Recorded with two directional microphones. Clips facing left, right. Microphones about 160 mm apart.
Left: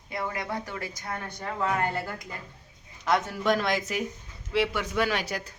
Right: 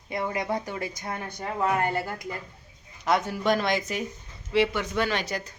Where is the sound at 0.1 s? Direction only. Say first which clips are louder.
Right 4 dB; 20° right (ahead or behind).